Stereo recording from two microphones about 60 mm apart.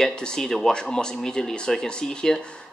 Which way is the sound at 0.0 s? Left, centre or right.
Centre.